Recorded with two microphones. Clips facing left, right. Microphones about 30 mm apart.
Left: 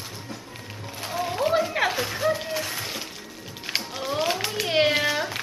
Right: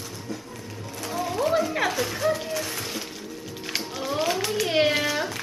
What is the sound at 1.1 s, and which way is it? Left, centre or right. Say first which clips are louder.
Music: even; centre.